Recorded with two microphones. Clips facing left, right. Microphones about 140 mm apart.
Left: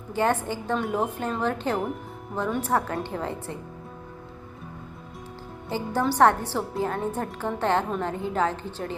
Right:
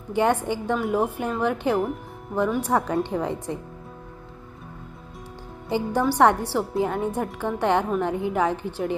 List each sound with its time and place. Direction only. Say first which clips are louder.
0.1 s a woman's voice: right 3 dB; 15° right (ahead or behind)
5.6 s a woman's voice: right 3 dB; 15° right (ahead or behind)